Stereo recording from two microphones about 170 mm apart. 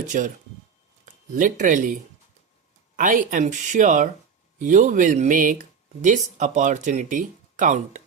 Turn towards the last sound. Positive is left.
turn(degrees=-45)  # may be behind; listen again after turning